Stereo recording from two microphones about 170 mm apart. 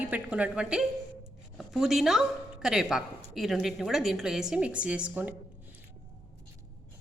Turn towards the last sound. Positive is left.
turn(degrees=-10)  # may be behind; listen again after turning